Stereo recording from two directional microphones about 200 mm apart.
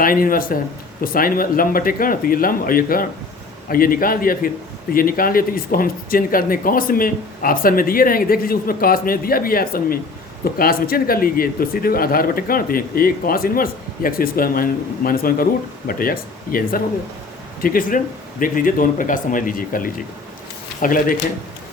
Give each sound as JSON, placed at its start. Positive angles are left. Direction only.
{"t": 0.0, "sound": "a man's voice", "side_deg": 45}